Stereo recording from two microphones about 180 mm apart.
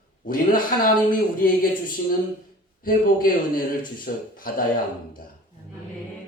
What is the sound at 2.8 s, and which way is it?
Speech, 50° left (ahead or behind).